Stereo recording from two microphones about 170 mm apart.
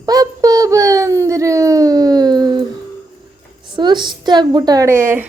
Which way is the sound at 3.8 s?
25° right (ahead or behind).